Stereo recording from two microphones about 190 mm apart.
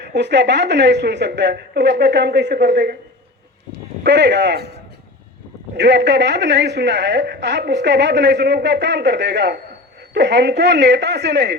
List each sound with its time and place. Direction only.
0.0 s a woman's voice: 65° right (ahead or behind)
5.7 s a woman's voice: 65° right (ahead or behind)